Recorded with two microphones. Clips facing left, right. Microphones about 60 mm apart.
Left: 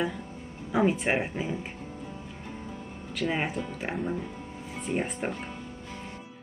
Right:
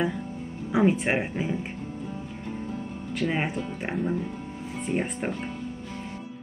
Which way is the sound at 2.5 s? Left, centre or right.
Right.